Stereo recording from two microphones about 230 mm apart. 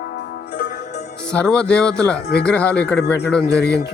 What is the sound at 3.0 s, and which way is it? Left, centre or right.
Speech, left.